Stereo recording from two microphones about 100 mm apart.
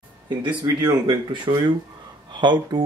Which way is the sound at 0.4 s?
50° right (ahead or behind).